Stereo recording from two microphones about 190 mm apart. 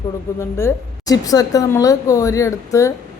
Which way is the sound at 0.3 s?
15° left (ahead or behind).